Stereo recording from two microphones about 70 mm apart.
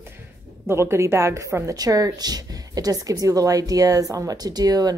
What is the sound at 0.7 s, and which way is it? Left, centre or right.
A woman's voice, right.